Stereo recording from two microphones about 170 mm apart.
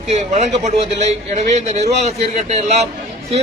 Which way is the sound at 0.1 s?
40° right (ahead or behind).